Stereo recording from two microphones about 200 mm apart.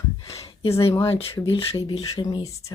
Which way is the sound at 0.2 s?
25° left (ahead or behind).